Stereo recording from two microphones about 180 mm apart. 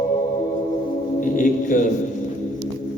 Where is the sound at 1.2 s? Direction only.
45° left (ahead or behind).